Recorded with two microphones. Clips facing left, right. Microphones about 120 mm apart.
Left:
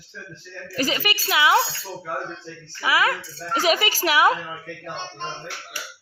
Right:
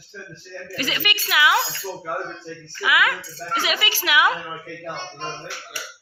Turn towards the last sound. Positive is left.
turn(degrees=35)  # may be behind; listen again after turning